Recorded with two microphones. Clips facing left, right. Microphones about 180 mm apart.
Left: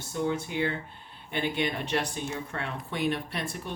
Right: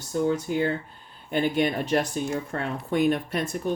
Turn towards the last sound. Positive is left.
turn(degrees=-45)  # may be behind; listen again after turning